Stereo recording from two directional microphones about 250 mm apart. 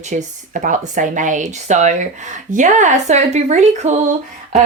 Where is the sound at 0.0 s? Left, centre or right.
Right.